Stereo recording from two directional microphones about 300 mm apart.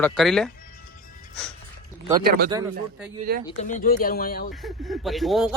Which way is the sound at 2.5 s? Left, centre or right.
Centre.